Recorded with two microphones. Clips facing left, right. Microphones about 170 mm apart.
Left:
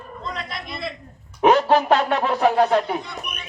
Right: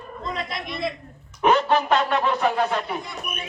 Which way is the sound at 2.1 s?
55° left (ahead or behind).